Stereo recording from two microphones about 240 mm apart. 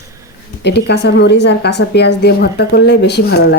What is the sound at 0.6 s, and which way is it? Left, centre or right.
A woman's voice, left.